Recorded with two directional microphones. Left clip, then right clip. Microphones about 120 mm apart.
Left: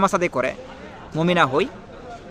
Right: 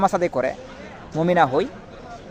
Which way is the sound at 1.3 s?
25° left (ahead or behind).